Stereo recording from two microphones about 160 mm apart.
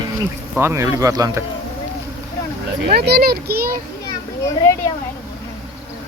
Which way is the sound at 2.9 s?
80° right.